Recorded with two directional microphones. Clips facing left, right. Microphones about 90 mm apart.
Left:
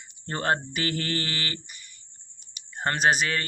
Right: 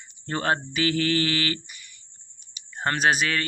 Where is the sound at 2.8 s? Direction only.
35° left (ahead or behind).